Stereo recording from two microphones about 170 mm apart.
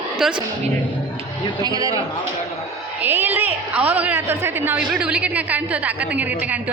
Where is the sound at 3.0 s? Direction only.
10° right (ahead or behind).